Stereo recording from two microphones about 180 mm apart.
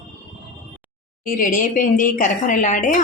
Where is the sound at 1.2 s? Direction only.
50° left (ahead or behind).